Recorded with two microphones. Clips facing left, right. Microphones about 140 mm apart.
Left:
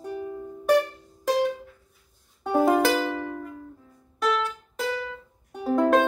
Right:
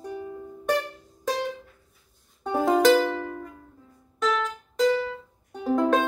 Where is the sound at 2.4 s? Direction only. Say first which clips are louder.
Right 1 dB; 5° left (ahead or behind).